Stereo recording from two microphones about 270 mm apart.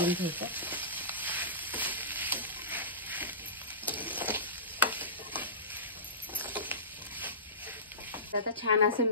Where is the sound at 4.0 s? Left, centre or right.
Centre.